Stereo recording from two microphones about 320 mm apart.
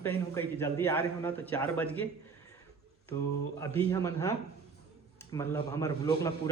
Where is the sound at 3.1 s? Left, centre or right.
Centre.